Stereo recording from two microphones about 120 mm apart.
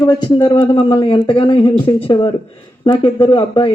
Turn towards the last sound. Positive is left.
turn(degrees=50)  # may be behind; listen again after turning